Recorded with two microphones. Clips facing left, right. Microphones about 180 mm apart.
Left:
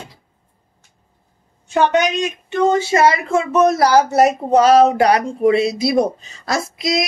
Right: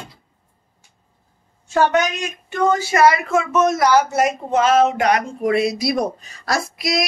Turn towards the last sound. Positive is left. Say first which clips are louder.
# left 2 dB
turn(degrees=25)  # may be behind; listen again after turning